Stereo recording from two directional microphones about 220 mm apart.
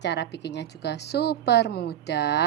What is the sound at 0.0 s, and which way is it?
A woman's voice, 50° left (ahead or behind).